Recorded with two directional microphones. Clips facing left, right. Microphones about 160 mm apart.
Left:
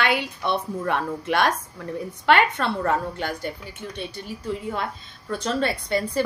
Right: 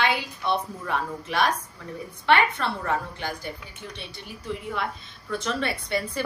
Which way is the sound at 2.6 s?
55° left (ahead or behind).